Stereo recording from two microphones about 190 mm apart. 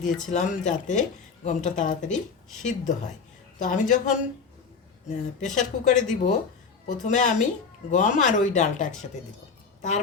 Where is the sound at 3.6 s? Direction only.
40° left (ahead or behind).